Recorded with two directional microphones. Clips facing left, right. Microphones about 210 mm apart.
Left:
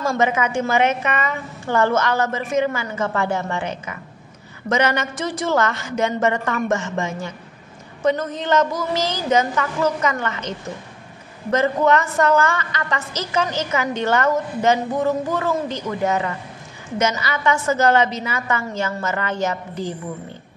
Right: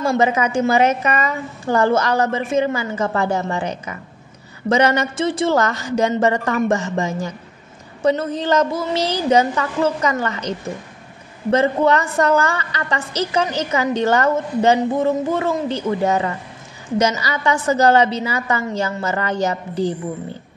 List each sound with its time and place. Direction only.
0.2 s a woman's voice: 35° right (ahead or behind)
11.5 s a woman's voice: 30° right (ahead or behind)